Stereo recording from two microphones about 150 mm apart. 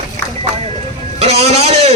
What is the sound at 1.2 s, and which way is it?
Speech, 45° right (ahead or behind).